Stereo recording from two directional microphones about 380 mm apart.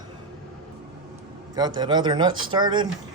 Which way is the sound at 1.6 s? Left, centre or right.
Centre.